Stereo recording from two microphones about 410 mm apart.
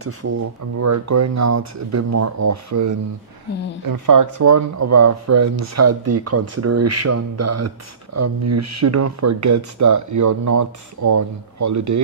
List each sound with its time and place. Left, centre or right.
0.7 s speech: right